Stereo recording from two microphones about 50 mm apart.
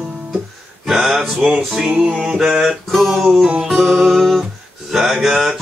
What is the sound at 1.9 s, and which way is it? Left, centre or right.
Music, right.